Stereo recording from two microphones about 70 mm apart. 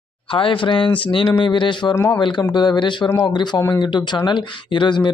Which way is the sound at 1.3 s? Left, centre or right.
Left.